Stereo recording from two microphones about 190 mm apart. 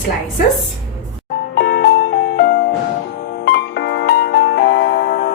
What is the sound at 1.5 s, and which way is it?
Music, 60° left (ahead or behind).